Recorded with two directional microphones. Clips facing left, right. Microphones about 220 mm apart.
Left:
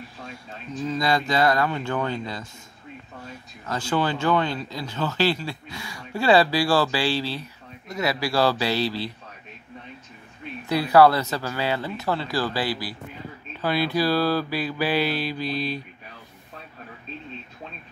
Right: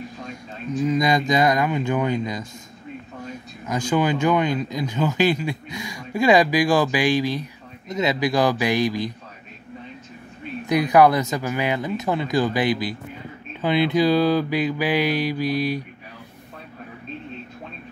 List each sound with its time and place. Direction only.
0.8 s speech: 15° right (ahead or behind)
3.6 s speech: 15° right (ahead or behind)
10.7 s speech: 15° right (ahead or behind)